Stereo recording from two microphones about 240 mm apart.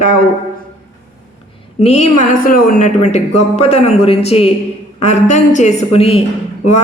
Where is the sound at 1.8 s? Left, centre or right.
Left.